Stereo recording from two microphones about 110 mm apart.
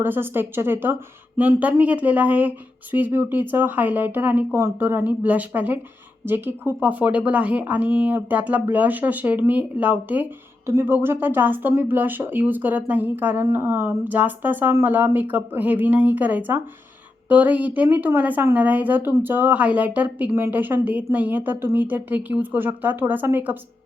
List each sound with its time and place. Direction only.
0.0 s speech: 20° right (ahead or behind)